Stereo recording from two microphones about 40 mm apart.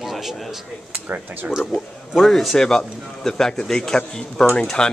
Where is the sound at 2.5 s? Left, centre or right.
Centre.